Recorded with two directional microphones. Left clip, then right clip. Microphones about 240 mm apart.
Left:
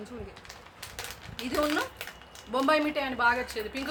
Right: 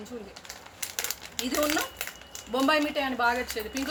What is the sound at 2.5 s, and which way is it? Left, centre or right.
Speech, centre.